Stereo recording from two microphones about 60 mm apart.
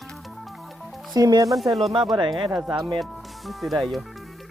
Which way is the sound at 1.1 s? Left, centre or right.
Right.